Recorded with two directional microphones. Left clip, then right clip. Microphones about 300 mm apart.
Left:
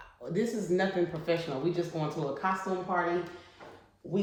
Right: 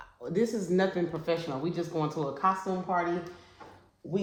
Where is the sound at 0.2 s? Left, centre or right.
Centre.